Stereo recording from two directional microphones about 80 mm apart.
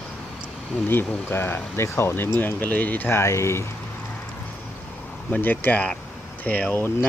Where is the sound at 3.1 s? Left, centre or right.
Left.